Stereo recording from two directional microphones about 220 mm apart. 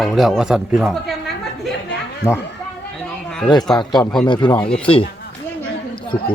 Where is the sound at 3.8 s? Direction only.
20° left (ahead or behind).